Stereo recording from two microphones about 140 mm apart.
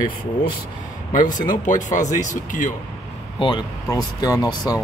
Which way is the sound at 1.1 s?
70° left (ahead or behind).